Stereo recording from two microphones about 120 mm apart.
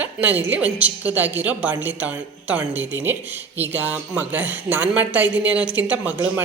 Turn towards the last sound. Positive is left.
turn(degrees=-15)  # may be behind; listen again after turning